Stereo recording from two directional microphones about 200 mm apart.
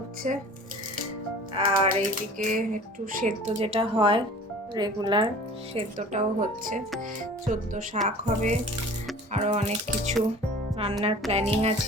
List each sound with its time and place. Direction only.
0.2 s speech: 40° right (ahead or behind)
1.5 s speech: 35° right (ahead or behind)
5.7 s speech: 35° right (ahead or behind)